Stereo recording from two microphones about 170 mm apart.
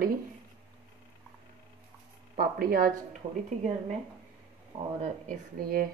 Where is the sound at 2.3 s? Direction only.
60° right (ahead or behind).